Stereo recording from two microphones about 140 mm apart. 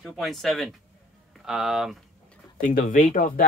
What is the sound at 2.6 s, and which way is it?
Speech, 70° left (ahead or behind).